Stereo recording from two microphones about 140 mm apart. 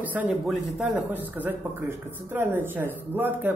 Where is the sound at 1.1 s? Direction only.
10° right (ahead or behind).